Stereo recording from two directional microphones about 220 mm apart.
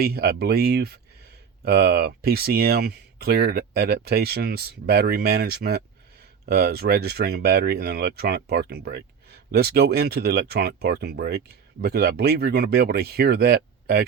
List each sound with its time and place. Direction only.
0.0 s speech: 45° right (ahead or behind)